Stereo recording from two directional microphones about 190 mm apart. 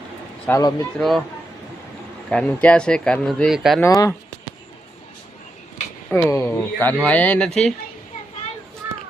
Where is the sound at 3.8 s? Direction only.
15° left (ahead or behind).